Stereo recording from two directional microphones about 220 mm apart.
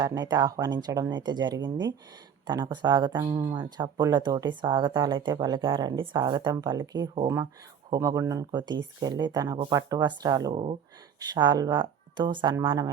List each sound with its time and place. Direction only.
0.0 s speech: 15° right (ahead or behind)